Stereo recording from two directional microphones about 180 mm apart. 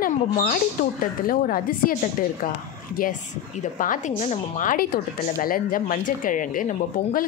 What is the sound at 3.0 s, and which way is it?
A woman's voice, 55° left (ahead or behind).